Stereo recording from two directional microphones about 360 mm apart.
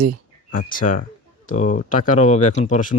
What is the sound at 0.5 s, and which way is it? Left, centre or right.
Speech, left.